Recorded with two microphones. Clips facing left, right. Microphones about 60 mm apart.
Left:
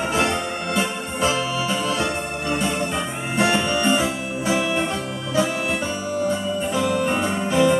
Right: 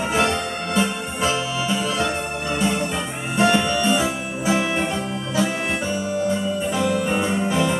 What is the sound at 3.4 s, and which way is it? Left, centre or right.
Music, centre.